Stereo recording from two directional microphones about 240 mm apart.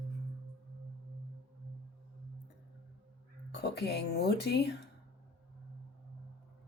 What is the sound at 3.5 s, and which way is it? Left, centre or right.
Speech, left.